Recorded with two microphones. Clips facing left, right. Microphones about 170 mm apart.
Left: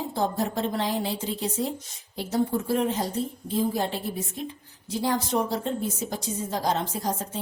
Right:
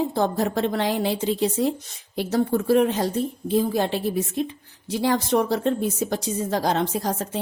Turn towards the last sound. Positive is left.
turn(degrees=-80)